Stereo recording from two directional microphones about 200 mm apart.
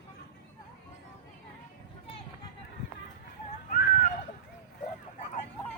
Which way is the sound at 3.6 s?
45° left (ahead or behind).